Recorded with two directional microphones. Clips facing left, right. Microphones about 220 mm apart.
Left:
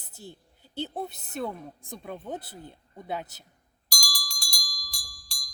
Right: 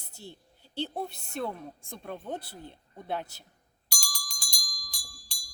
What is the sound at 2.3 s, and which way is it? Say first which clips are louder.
Speech: left 1 dB; 20° left (ahead or behind).